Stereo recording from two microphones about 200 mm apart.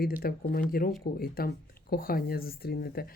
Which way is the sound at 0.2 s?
50° left (ahead or behind).